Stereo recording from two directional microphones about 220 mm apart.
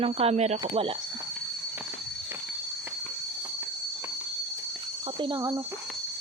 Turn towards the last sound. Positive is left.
turn(degrees=-15)  # may be behind; listen again after turning